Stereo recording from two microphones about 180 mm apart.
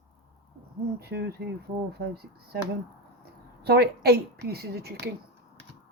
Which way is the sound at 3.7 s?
65° right (ahead or behind).